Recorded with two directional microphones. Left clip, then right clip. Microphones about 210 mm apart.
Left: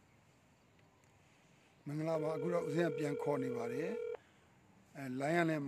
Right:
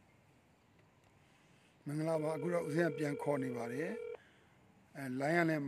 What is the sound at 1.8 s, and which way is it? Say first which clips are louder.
A man's voice: right 1 dB; 15° right (ahead or behind).